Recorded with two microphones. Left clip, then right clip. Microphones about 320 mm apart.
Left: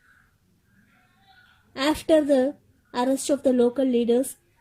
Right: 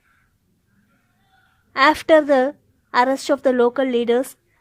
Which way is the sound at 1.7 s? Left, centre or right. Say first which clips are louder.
Right 7 dB; right.